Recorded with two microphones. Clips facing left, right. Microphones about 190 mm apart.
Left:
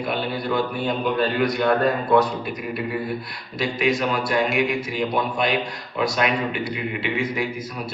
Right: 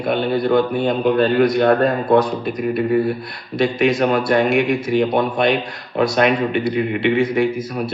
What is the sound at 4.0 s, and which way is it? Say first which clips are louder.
Speech: right 6 dB; 60° right (ahead or behind).